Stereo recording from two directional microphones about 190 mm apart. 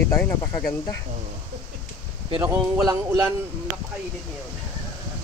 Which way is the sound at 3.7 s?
20° right (ahead or behind).